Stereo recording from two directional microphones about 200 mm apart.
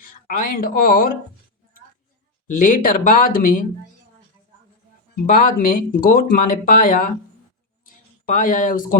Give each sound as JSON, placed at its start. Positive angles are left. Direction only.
{"t": 0.0, "sound": "speech", "side_deg": 45}
{"t": 2.6, "sound": "speech", "side_deg": 40}
{"t": 5.2, "sound": "speech", "side_deg": 40}
{"t": 7.9, "sound": "a sound", "side_deg": 40}